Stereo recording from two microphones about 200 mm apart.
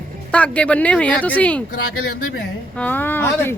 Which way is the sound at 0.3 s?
5° left (ahead or behind).